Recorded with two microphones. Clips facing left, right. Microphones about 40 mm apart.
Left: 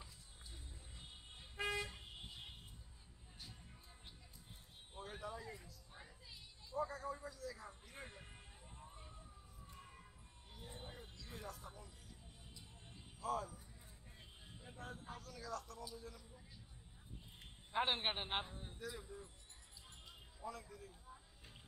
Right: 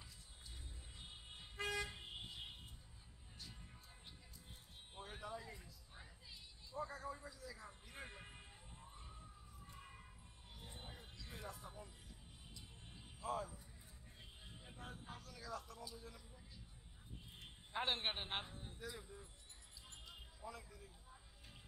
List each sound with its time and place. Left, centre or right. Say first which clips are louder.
1.6 s toot: left 1 dB; centre
4.9 s a sound: left 1 dB; centre
7.3 s music: left 4 dB; centre
8.2 s vehicle: right 2 dB; centre
8.8 s emergency vehicle: left 1 dB; centre
9.7 s a sound: even; centre
10.9 s music: left 2 dB; centre
11.4 s music: right 1 dB; centre
13.2 s speech: left 2 dB; centre
14.6 s music: left 3 dB; centre
15.8 s a man's voice: left 2 dB; centre
17.7 s a man's voice: left 3 dB; centre
20.4 s a man's voice: left 4 dB; centre